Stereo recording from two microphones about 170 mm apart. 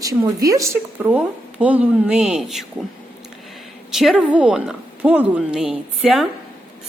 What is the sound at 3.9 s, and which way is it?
A woman's voice, 5° right (ahead or behind).